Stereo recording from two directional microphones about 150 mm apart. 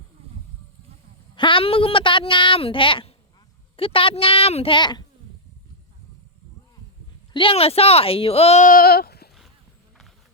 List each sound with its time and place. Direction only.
1.4 s speech: 35° left (ahead or behind)
7.3 s speech: 35° left (ahead or behind)
8.6 s sheep: 75° left (ahead or behind); by 9.3 s 90° left